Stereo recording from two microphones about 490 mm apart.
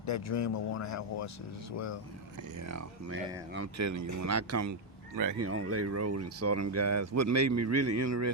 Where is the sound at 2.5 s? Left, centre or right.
Right.